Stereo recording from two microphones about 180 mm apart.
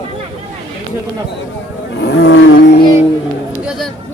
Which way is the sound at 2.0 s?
70° left (ahead or behind).